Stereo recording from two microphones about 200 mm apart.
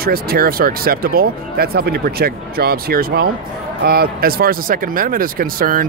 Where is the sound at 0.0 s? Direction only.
50° right (ahead or behind).